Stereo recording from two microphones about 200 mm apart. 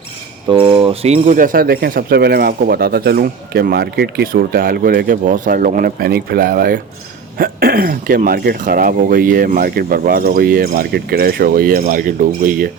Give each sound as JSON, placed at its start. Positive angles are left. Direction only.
{"t": 0.4, "sound": "speech", "side_deg": -25}